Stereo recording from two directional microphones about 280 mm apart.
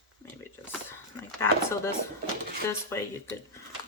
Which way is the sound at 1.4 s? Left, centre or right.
Centre.